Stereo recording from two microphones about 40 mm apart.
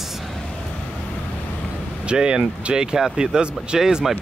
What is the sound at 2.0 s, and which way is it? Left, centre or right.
Speech, right.